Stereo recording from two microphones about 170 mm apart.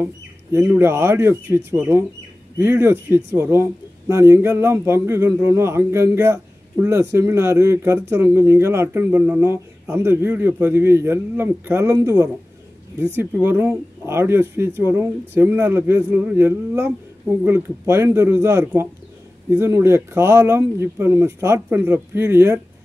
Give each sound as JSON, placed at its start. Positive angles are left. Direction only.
{"t": 0.0, "sound": "a man's voice", "side_deg": -15}